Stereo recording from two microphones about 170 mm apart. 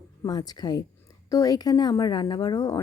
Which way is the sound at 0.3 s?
25° left (ahead or behind).